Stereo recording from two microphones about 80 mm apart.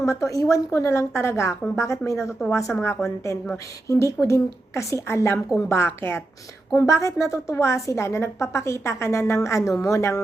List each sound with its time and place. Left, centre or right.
0.0 s a woman's voice: left